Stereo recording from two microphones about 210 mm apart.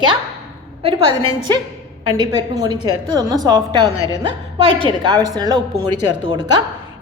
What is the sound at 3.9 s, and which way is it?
Speech, 15° left (ahead or behind).